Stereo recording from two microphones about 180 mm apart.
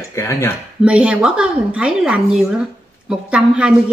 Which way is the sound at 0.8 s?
5° right (ahead or behind).